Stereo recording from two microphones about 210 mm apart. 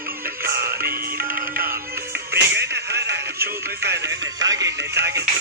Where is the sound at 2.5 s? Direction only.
55° right (ahead or behind).